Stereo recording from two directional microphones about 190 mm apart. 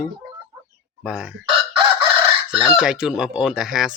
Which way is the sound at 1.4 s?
30° right (ahead or behind).